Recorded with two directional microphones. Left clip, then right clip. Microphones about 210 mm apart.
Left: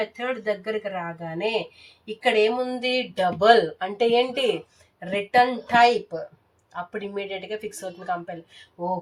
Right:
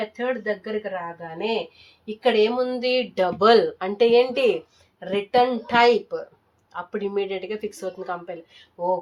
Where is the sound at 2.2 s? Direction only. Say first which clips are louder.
Right 1 dB; 35° right (ahead or behind).